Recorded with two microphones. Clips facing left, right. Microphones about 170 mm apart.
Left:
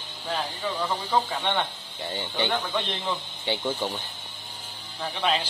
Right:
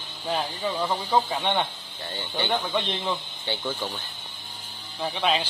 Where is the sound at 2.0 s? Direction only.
10° left (ahead or behind).